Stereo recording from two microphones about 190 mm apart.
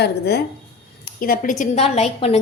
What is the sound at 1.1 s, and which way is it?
A woman's voice, 50° left (ahead or behind).